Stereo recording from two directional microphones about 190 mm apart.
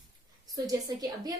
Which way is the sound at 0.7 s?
20° right (ahead or behind).